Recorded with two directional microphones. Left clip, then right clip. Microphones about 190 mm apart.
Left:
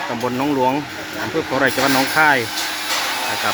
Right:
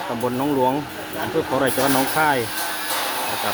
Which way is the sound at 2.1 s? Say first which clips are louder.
Left 7 dB; centre (ahead or behind).